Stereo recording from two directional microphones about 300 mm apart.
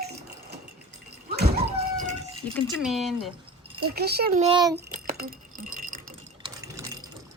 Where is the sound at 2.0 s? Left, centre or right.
Right.